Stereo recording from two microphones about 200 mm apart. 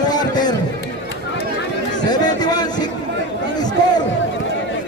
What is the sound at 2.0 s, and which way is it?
Speech, 20° left (ahead or behind).